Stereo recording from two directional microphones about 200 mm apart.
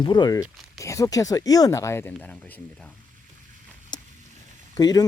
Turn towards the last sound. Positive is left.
turn(degrees=20)  # may be behind; listen again after turning